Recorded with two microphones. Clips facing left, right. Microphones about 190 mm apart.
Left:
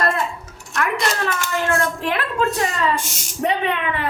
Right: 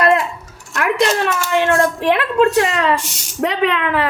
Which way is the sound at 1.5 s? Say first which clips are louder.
Right 7 dB; 75° right (ahead or behind).